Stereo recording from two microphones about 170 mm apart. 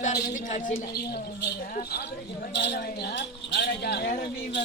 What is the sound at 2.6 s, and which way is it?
Speech, 80° left.